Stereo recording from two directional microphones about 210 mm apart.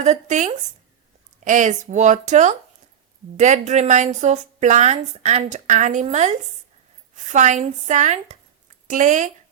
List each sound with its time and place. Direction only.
0.0 s a woman's voice: 35° right (ahead or behind)